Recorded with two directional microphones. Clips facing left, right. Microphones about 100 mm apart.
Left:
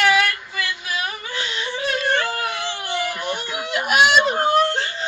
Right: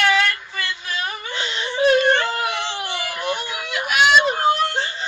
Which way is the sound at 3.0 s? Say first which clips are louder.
Even; centre (ahead or behind).